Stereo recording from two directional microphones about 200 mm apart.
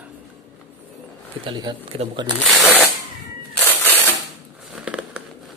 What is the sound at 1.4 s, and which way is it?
Speech, 25° right (ahead or behind).